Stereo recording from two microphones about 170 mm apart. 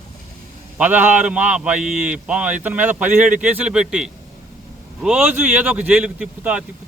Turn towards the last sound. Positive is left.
turn(degrees=-5)  # may be behind; listen again after turning